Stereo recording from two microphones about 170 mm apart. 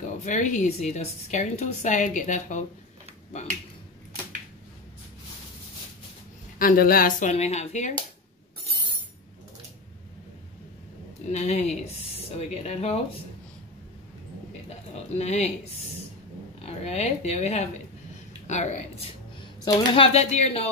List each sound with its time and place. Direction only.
0.2 s a woman's voice: 45° left (ahead or behind)
6.6 s a woman's voice: 60° left (ahead or behind); by 7.9 s 40° left (ahead or behind)
11.3 s speech: 40° left (ahead or behind)
14.7 s a sound: 40° left (ahead or behind)
16.6 s a woman's voice: 40° left (ahead or behind)